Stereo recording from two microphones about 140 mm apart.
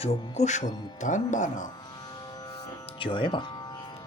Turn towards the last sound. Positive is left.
turn(degrees=35)  # may be behind; listen again after turning